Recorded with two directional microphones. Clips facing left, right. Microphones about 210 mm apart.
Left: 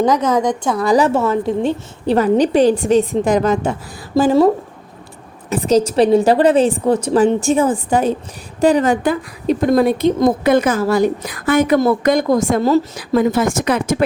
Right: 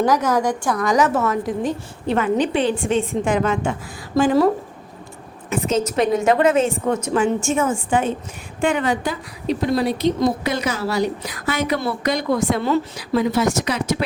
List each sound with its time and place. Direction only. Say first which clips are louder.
0.0 s a woman's voice: left 3 dB; 20° left (ahead or behind)
5.5 s a woman's voice: left 6 dB; 35° left (ahead or behind); by 14.0 s 50° left (ahead or behind)